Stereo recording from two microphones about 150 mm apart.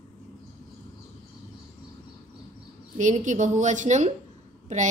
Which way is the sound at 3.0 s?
55° right (ahead or behind).